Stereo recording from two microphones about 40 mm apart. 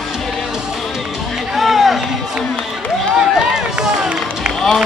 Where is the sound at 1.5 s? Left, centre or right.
Centre.